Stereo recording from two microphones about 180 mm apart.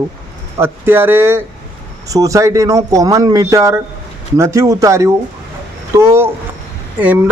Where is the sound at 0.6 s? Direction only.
10° right (ahead or behind).